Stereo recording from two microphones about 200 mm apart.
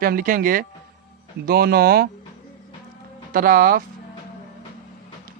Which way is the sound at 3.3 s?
45° right (ahead or behind).